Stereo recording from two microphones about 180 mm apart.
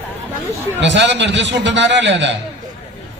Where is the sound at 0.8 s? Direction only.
80° right.